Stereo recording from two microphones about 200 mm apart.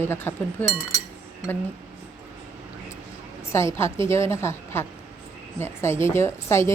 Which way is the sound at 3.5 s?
15° left (ahead or behind).